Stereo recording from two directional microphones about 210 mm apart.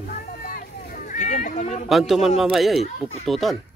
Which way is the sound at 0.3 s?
40° left (ahead or behind).